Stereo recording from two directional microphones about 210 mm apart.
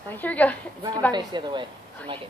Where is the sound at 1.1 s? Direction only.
20° right (ahead or behind).